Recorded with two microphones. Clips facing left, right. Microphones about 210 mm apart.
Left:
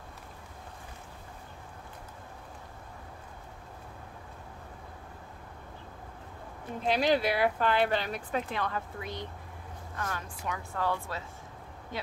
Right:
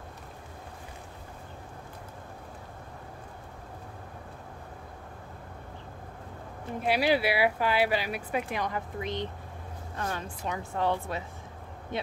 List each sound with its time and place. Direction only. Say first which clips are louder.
6.8 s a woman's voice: right 1 dB; 10° right (ahead or behind)